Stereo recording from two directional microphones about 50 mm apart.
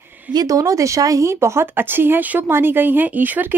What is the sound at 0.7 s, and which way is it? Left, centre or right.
Speech, right.